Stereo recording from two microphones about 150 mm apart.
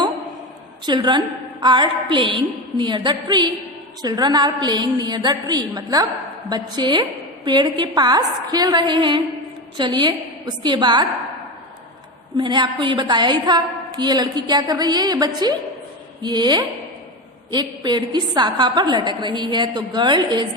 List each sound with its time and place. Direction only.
0.9 s a woman's voice: 30° right (ahead or behind)
12.4 s a woman's voice: 30° right (ahead or behind)